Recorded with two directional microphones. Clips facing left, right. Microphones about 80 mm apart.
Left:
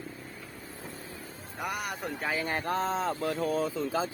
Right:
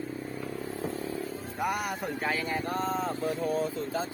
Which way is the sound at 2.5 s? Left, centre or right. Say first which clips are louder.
Left 1 dB; left.